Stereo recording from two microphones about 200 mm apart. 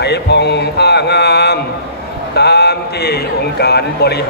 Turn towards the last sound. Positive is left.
turn(degrees=55)  # may be behind; listen again after turning